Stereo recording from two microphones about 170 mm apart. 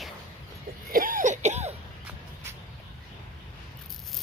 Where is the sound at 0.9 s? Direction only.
55° right (ahead or behind).